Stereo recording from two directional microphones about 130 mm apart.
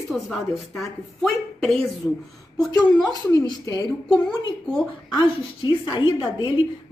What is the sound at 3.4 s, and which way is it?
Speech, 30° left (ahead or behind).